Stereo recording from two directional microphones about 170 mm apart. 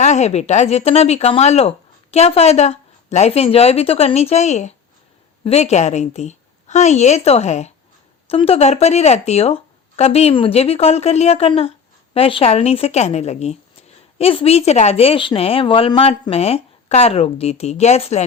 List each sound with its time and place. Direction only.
0.0 s speech: 40° left (ahead or behind)